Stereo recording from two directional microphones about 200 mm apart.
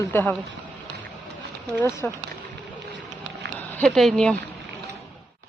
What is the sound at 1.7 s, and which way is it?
Speech, 10° left (ahead or behind).